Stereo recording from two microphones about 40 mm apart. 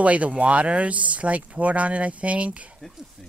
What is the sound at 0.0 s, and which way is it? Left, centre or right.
Speech, right.